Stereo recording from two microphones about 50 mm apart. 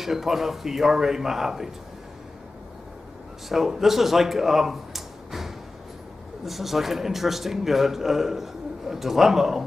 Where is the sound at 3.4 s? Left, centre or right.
Centre.